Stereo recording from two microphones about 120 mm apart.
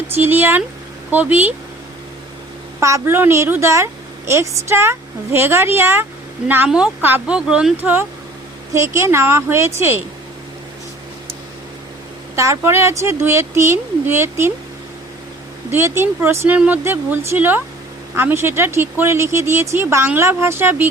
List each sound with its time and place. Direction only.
0.1 s speech: 20° right (ahead or behind)
2.8 s speech: 25° right (ahead or behind)
6.7 s speech: 10° right (ahead or behind)
12.4 s speech: 25° right (ahead or behind)
15.7 s speech: 20° right (ahead or behind)